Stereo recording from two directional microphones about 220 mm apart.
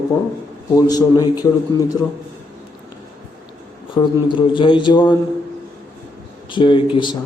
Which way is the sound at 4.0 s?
20° left (ahead or behind).